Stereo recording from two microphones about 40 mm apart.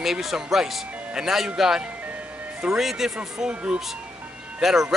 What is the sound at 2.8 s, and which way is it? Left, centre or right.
Speech, centre.